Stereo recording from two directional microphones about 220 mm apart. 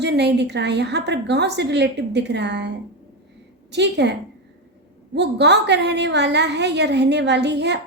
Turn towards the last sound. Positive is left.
turn(degrees=-50)  # may be behind; listen again after turning